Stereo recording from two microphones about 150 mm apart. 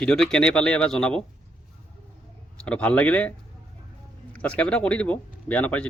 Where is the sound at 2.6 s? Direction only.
10° left (ahead or behind).